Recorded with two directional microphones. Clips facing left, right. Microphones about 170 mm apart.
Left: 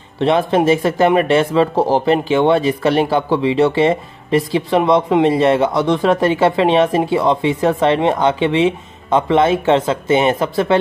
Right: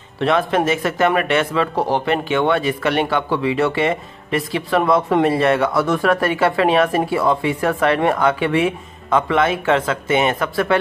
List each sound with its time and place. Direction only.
0.2 s speech: 25° left (ahead or behind)